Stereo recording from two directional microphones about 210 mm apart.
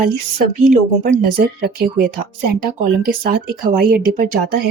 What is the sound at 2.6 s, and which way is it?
Speech, 45° right (ahead or behind).